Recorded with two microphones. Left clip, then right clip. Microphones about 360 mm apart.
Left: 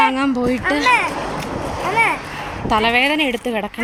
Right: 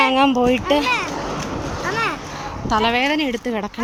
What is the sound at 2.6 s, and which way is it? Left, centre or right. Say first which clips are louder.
A woman's voice: left 2 dB; centre.